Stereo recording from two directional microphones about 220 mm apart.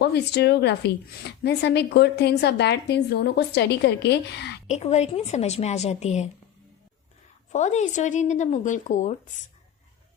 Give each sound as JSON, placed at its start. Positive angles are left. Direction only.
{"t": 0.0, "sound": "a woman's voice", "side_deg": 50}
{"t": 4.6, "sound": "a woman's voice", "side_deg": 30}
{"t": 7.5, "sound": "speech", "side_deg": 30}